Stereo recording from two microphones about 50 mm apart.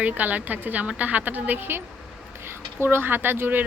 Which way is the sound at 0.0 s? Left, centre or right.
Right.